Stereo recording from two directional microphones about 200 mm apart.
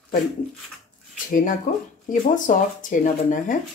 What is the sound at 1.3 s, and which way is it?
Speech, 40° left (ahead or behind).